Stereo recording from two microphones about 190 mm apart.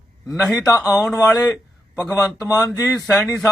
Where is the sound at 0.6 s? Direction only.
15° left (ahead or behind).